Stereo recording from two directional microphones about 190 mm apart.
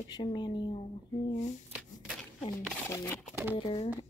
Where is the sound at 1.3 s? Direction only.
40° left (ahead or behind).